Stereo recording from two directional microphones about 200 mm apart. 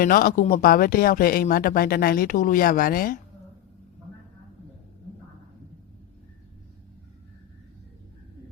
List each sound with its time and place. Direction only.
0.0 s speech: 45° left (ahead or behind)